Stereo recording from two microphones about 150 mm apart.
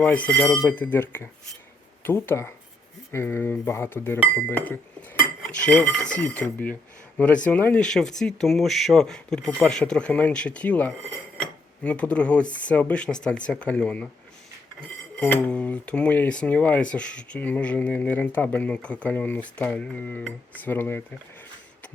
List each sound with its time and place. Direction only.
0.0 s speech: 10° left (ahead or behind)
5.4 s cutlery: 5° left (ahead or behind)
6.1 s speech: 10° left (ahead or behind)
15.2 s speech: 10° left (ahead or behind)